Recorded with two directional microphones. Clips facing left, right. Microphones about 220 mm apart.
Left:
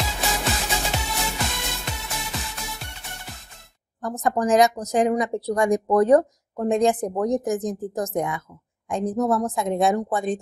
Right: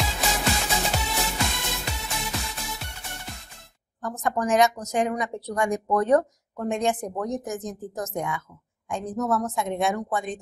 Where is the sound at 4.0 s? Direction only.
35° left (ahead or behind).